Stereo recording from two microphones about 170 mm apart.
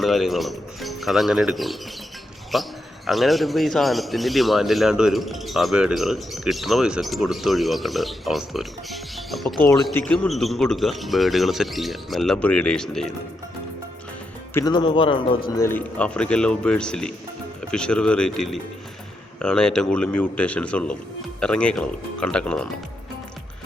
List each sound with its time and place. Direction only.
0.0 s speech: centre (ahead or behind)
14.5 s speech: 25° left (ahead or behind)
15.4 s a man's voice: 20° left (ahead or behind)